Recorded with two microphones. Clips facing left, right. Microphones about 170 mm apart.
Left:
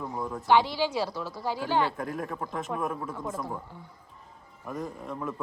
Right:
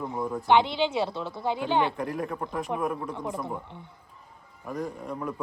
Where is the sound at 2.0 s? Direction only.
Centre (ahead or behind).